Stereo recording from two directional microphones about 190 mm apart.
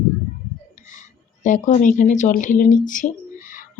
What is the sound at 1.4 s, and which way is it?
A woman's voice, 40° left (ahead or behind).